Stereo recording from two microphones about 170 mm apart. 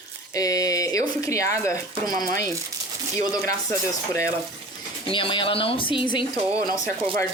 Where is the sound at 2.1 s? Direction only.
55° right (ahead or behind).